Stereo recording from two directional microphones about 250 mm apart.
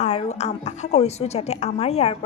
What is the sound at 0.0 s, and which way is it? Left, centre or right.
A woman's voice, left.